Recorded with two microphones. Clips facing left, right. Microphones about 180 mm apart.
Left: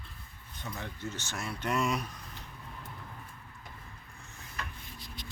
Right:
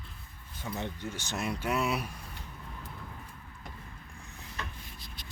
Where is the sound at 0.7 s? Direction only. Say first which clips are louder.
Right 3 dB; 15° right (ahead or behind).